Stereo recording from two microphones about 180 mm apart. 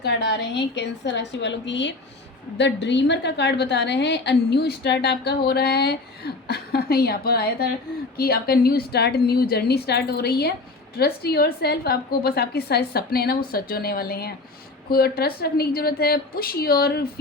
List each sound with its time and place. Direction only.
0.0 s a woman's voice: 75° left (ahead or behind); by 17.1 s 60° left (ahead or behind)